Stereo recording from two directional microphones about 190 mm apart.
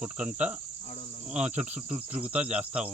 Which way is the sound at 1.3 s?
35° right (ahead or behind).